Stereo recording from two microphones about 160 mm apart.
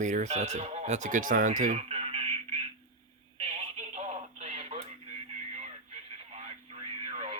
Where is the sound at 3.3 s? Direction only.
40° right (ahead or behind).